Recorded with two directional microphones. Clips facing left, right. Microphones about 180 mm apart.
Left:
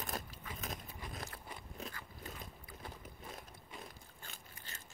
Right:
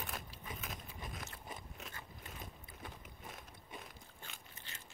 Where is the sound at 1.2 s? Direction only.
20° right (ahead or behind).